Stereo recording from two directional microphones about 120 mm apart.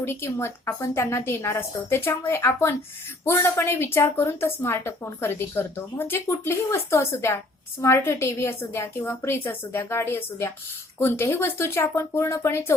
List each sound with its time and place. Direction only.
0.0 s a woman's voice: 20° left (ahead or behind)